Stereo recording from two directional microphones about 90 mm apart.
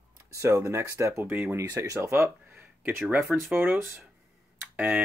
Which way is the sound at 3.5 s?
25° right (ahead or behind).